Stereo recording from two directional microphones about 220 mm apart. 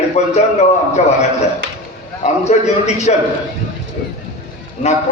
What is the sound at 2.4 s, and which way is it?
Speech, 30° left (ahead or behind).